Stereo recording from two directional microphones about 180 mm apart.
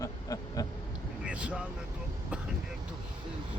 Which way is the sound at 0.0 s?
20° left (ahead or behind).